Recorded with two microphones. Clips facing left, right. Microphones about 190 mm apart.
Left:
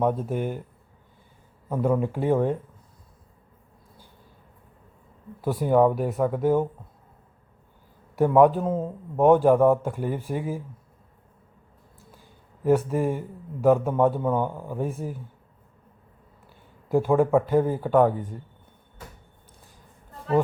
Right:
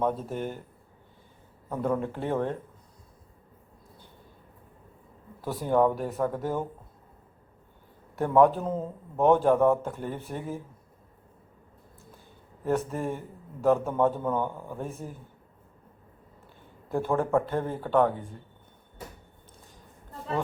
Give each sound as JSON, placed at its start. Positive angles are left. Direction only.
{"t": 0.0, "sound": "a man's voice", "side_deg": 10}
{"t": 1.7, "sound": "a man's voice", "side_deg": 10}
{"t": 5.4, "sound": "a man's voice", "side_deg": 10}
{"t": 8.1, "sound": "a man's voice", "side_deg": 10}
{"t": 12.6, "sound": "a man's voice", "side_deg": 10}
{"t": 16.9, "sound": "a man's voice", "side_deg": 10}